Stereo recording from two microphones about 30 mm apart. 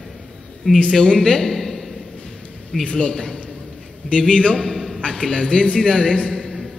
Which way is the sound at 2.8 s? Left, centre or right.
Left.